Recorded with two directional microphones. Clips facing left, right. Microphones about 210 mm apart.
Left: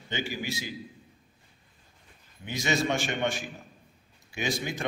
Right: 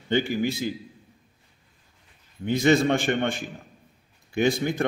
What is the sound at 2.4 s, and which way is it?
A man's voice, 55° right (ahead or behind).